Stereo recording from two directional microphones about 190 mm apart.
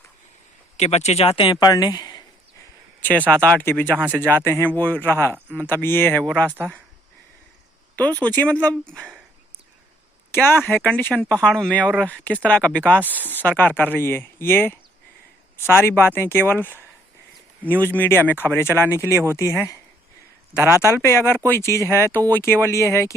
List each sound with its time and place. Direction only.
0.8 s speech: 35° left (ahead or behind)
3.0 s speech: 10° left (ahead or behind)
3.9 s speech: 10° right (ahead or behind)
4.2 s speech: 10° left (ahead or behind)
7.9 s speech: 10° left (ahead or behind)
10.3 s speech: 10° left (ahead or behind)
13.0 s speech: 10° right (ahead or behind)
13.4 s speech: 10° left (ahead or behind)
20.6 s speech: 15° right (ahead or behind)
21.0 s speech: 15° left (ahead or behind)